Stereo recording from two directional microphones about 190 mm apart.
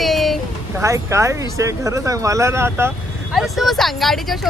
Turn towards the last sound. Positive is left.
turn(degrees=0)  # may be behind; listen again after turning